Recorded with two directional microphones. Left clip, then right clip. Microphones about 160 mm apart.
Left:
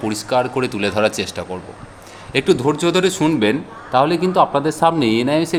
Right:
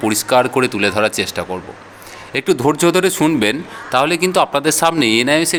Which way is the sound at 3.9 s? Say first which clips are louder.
Right 1 dB; 5° right (ahead or behind).